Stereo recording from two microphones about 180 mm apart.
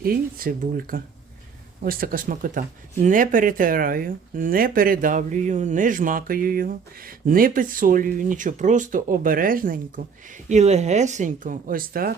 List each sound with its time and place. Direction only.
0.0 s speech: 55° right (ahead or behind)